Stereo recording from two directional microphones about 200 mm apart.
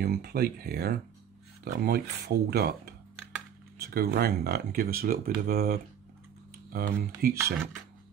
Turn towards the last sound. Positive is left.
turn(degrees=-45)  # may be behind; listen again after turning